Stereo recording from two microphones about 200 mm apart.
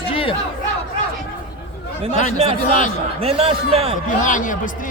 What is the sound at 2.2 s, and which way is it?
Speech, 40° left (ahead or behind).